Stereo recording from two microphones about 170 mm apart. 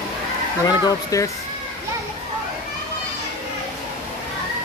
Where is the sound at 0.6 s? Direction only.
20° left (ahead or behind).